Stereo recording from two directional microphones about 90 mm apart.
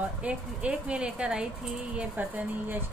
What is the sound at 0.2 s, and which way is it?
Speech, 10° right (ahead or behind).